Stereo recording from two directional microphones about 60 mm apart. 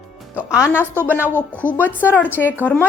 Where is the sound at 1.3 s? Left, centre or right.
Right.